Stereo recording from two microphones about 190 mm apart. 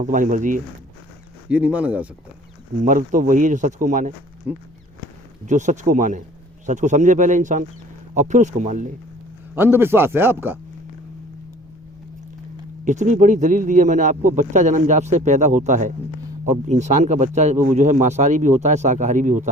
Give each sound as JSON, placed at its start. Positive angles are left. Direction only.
{"t": 0.0, "sound": "speech", "side_deg": -45}
{"t": 1.5, "sound": "speech", "side_deg": -5}
{"t": 2.8, "sound": "speech", "side_deg": -45}
{"t": 4.5, "sound": "speech", "side_deg": -10}
{"t": 5.5, "sound": "speech", "side_deg": -40}
{"t": 9.6, "sound": "speech", "side_deg": -10}
{"t": 12.8, "sound": "speech", "side_deg": -40}